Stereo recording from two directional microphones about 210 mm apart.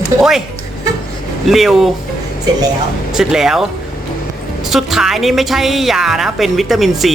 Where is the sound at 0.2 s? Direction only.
Centre (ahead or behind).